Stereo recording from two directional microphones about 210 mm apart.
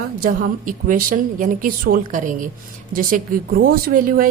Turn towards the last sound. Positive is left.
turn(degrees=-40)  # may be behind; listen again after turning